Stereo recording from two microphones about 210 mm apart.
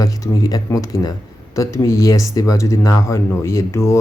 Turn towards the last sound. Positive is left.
turn(degrees=15)  # may be behind; listen again after turning